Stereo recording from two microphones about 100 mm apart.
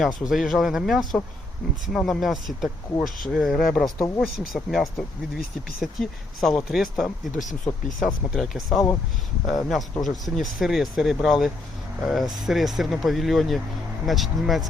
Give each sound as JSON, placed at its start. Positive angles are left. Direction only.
{"t": 0.3, "sound": "speech", "side_deg": 0}
{"t": 3.8, "sound": "speech", "side_deg": 35}
{"t": 4.2, "sound": "speech", "side_deg": 0}